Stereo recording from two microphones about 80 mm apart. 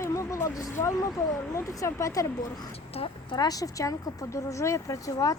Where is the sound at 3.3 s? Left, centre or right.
Left.